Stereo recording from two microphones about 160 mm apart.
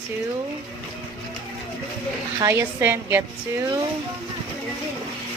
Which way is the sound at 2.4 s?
15° right (ahead or behind).